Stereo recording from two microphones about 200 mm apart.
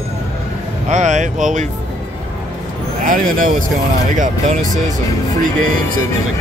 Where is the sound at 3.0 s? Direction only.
40° right (ahead or behind).